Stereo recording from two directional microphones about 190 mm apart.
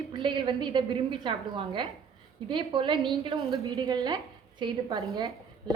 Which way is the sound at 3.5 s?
15° right (ahead or behind).